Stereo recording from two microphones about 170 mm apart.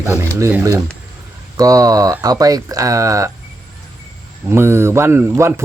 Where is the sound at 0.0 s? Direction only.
15° right (ahead or behind).